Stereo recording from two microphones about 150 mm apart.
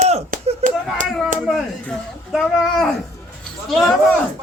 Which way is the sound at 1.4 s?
5° left (ahead or behind).